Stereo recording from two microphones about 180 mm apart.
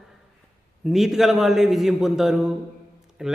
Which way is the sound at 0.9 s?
Centre (ahead or behind).